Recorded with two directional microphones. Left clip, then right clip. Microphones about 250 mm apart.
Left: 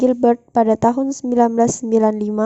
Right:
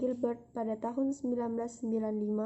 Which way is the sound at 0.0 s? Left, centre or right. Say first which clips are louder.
Left 18 dB; left.